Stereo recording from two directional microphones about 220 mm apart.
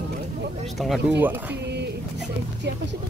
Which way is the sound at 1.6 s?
50° right (ahead or behind).